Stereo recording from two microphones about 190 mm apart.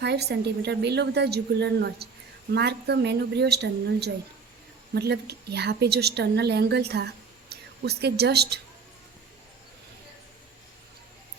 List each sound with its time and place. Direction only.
0.0 s a woman's voice: 60° right (ahead or behind)